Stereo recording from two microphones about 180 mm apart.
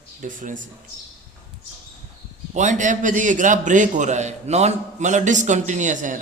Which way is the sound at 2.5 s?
45° right (ahead or behind).